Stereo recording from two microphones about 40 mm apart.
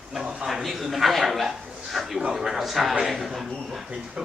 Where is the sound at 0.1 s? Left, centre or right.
Centre.